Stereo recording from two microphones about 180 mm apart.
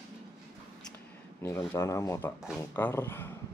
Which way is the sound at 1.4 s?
15° left (ahead or behind).